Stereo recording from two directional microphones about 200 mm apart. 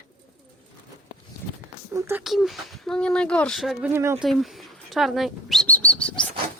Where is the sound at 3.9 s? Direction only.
10° right (ahead or behind).